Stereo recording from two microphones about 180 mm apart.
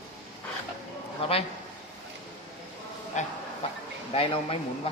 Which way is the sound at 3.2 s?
40° left (ahead or behind).